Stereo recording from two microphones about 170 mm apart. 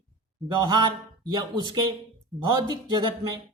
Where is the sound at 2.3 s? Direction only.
25° right (ahead or behind).